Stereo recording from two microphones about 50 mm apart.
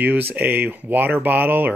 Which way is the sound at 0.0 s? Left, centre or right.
Right.